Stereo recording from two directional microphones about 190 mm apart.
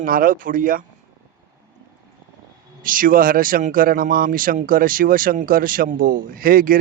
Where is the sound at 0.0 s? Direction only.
45° right (ahead or behind).